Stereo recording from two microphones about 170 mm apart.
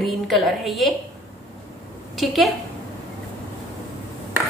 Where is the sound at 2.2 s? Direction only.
Centre (ahead or behind).